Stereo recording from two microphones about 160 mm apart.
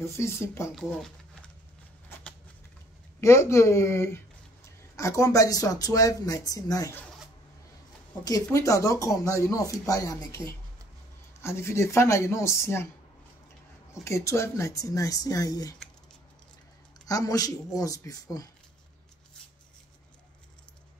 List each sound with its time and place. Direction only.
0.0 s speech: 15° left (ahead or behind)
0.7 s speech: 5° left (ahead or behind)
3.2 s speech: 15° left (ahead or behind)
8.2 s speech: 25° left (ahead or behind)
14.0 s speech: 20° left (ahead or behind)
17.0 s speech: 20° left (ahead or behind)